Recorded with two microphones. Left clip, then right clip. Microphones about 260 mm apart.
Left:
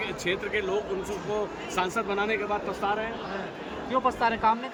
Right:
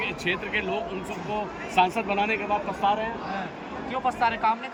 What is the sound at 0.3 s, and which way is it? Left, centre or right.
A man's voice, centre.